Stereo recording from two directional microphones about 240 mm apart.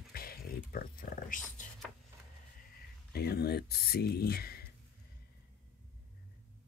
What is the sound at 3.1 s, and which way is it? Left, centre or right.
Speech, left.